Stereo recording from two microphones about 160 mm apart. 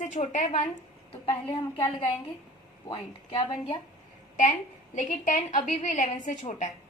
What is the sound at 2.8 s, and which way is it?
Speech, 30° left (ahead or behind).